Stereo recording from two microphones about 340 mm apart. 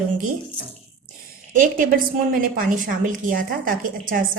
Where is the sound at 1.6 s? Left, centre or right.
Right.